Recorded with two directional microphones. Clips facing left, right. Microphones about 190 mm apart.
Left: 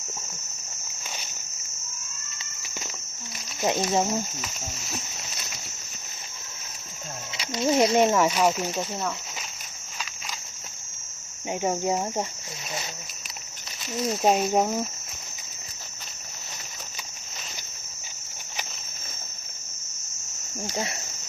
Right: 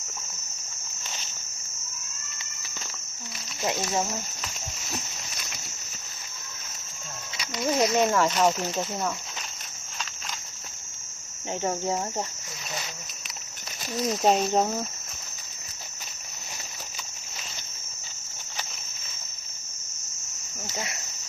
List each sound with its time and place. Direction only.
3.6 s speech: 20° left (ahead or behind)
7.3 s speech: 25° left (ahead or behind); by 8.9 s 10° left (ahead or behind)
11.6 s speech: 10° left (ahead or behind)
14.2 s speech: 5° left (ahead or behind)
20.7 s speech: 30° left (ahead or behind)